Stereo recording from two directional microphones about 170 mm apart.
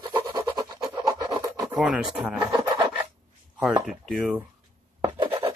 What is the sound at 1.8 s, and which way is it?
Speech, 5° right (ahead or behind).